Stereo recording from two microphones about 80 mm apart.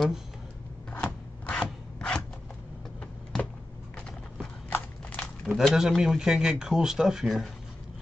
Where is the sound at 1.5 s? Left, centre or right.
Centre.